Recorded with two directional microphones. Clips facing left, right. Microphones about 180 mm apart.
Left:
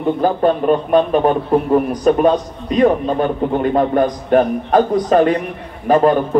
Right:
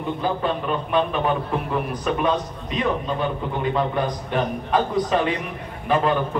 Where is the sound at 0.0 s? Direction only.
45° left (ahead or behind).